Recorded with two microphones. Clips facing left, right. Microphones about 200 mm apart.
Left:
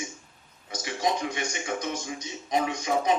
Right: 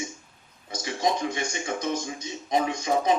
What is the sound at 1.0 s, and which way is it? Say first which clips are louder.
Speech: right 2 dB; 35° right (ahead or behind).